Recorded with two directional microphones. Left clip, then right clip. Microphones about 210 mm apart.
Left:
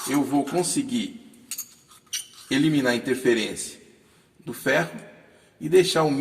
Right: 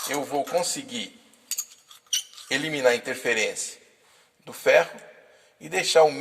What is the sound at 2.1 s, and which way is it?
A man's voice, 30° right (ahead or behind).